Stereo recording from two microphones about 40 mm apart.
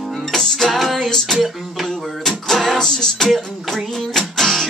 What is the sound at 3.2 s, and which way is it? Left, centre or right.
Music, centre.